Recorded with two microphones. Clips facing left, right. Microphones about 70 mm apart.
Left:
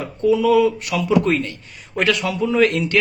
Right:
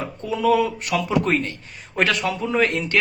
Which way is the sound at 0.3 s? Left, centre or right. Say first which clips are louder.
Left 5 dB; right.